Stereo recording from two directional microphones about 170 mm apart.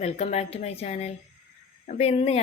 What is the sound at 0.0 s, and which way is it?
Speech, 40° left (ahead or behind).